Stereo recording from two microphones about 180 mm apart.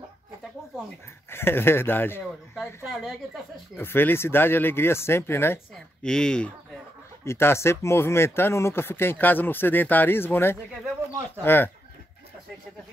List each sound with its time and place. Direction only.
1.3 s speech: 10° left (ahead or behind)
2.8 s speech: centre (ahead or behind)
3.7 s speech: 10° left (ahead or behind)